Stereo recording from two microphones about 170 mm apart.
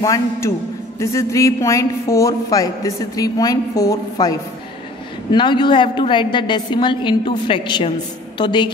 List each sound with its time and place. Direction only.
0.0 s a woman's voice: 20° left (ahead or behind)